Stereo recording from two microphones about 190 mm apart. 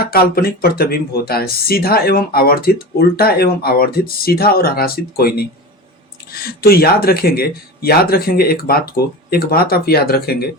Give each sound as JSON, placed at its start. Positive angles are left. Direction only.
{"t": 0.0, "sound": "speech", "side_deg": 55}